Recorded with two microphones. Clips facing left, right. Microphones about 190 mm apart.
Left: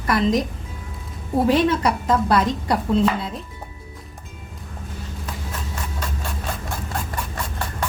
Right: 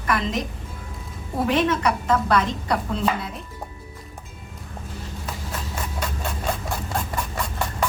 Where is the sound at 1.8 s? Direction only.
30° left (ahead or behind).